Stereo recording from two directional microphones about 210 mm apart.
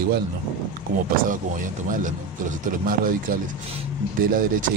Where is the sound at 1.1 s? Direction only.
40° right (ahead or behind).